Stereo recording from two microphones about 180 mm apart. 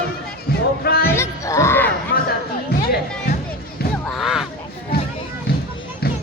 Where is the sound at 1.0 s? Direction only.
15° left (ahead or behind).